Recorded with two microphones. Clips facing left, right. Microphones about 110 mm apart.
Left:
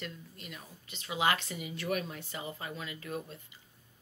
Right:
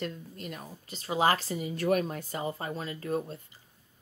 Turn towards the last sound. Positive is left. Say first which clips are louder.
# right 8 dB
turn(degrees=-40)  # may be behind; listen again after turning